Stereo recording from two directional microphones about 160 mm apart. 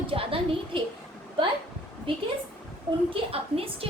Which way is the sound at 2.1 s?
35° right (ahead or behind).